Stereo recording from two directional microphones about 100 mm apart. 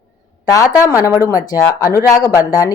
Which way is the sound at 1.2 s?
30° left (ahead or behind).